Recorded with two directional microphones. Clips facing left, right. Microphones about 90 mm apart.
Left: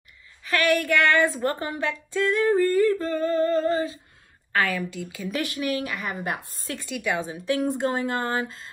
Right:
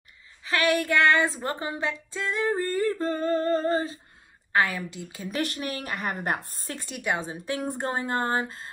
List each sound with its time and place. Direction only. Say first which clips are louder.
0.5 s speech: left 2 dB; 20° right (ahead or behind)
3.1 s humming: left 2 dB; 40° right (ahead or behind)
4.5 s a woman's voice: even; 20° right (ahead or behind)
5.5 s a woman's voice: left 5 dB; 50° right (ahead or behind)
6.6 s speech: left 3 dB; 20° right (ahead or behind)